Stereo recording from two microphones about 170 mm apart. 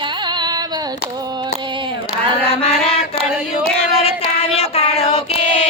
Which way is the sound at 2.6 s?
35° left (ahead or behind).